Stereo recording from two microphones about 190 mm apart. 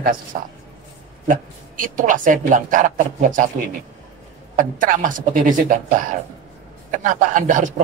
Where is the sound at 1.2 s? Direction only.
45° right (ahead or behind).